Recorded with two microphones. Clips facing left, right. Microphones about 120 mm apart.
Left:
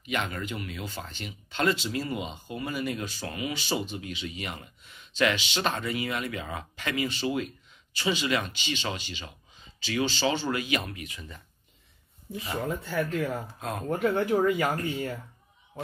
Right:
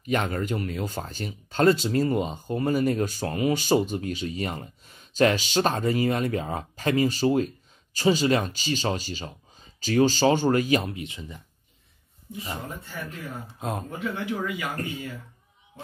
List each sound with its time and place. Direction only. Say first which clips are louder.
0.0 s speech: right 6 dB; 40° right (ahead or behind); by 11.4 s 20° right (ahead or behind)
12.5 s speech: left 7 dB; 90° left
13.6 s speech: right 3 dB; 25° right (ahead or behind)
13.8 s speech: left 5 dB; 55° left (ahead or behind)